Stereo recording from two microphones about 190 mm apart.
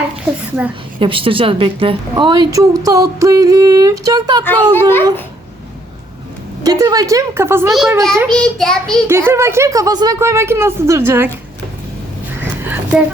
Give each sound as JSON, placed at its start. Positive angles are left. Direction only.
{"t": 0.9, "sound": "a woman's voice", "side_deg": -30}
{"t": 4.4, "sound": "speech", "side_deg": 10}
{"t": 6.6, "sound": "speech", "side_deg": -20}
{"t": 7.7, "sound": "child singing", "side_deg": 0}
{"t": 9.0, "sound": "speech", "side_deg": -15}
{"t": 12.4, "sound": "a sound", "side_deg": -10}